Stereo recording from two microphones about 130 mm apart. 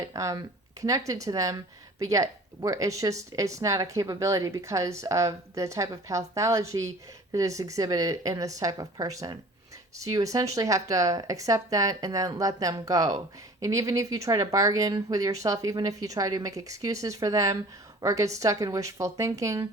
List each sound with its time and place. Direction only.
0.0 s speech: 25° right (ahead or behind)